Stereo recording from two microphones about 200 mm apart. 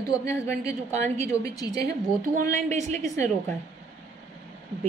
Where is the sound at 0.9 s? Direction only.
35° right (ahead or behind).